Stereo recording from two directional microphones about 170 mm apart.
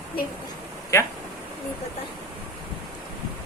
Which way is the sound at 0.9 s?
15° left (ahead or behind).